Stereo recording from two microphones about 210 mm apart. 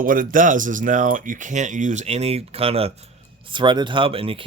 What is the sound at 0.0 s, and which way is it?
Speech, 40° right (ahead or behind).